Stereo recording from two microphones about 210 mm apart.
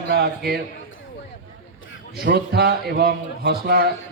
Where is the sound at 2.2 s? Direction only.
50° right (ahead or behind).